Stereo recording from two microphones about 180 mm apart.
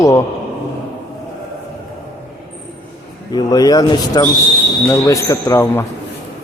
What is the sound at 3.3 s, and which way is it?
Speech, 20° left (ahead or behind).